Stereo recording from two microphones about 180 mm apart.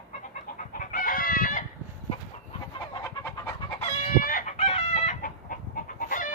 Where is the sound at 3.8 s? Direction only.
45° left (ahead or behind).